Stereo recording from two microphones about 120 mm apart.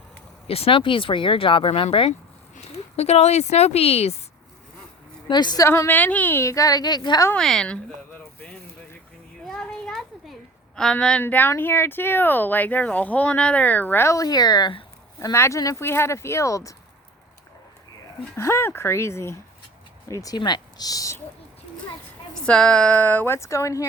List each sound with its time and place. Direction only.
0.4 s speech: 55° left (ahead or behind)
2.6 s speech: 60° left (ahead or behind)
5.3 s speech: 35° left (ahead or behind)
5.6 s a woman's voice: 20° left (ahead or behind)
7.3 s a woman's voice: 5° left (ahead or behind)
8.1 s vehicle: 15° left (ahead or behind)
9.5 s a sound: 5° left (ahead or behind)
10.8 s a woman's voice: 5° left (ahead or behind); by 14.8 s 40° left (ahead or behind)
15.2 s a woman's voice: 25° left (ahead or behind)
18.3 s a woman's voice: 20° left (ahead or behind)
20.2 s speech: 35° left (ahead or behind)
22.4 s a woman's voice: 10° left (ahead or behind); by 23.8 s 25° left (ahead or behind)